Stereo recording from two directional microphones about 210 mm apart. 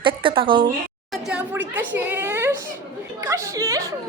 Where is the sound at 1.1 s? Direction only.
5° right (ahead or behind).